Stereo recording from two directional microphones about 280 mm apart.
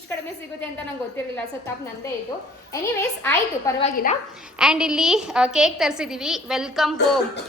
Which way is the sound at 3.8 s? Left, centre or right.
Left.